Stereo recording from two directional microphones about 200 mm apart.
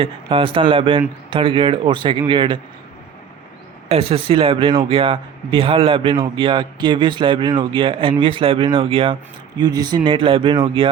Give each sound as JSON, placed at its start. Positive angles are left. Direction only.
{"t": 0.0, "sound": "speech", "side_deg": -25}
{"t": 3.8, "sound": "speech", "side_deg": -30}